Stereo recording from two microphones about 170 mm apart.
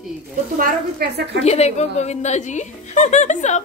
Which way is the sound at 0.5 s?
60° right (ahead or behind).